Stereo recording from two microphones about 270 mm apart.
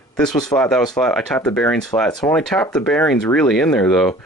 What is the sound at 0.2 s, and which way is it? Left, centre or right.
Speech, centre.